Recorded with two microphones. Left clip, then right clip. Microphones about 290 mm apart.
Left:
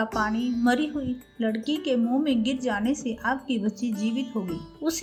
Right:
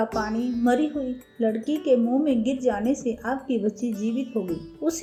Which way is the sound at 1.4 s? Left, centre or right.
Left.